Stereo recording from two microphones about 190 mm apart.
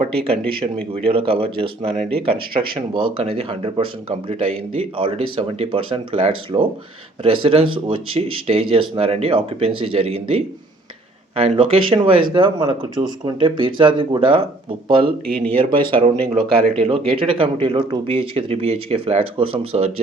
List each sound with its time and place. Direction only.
0.0 s speech: 30° right (ahead or behind)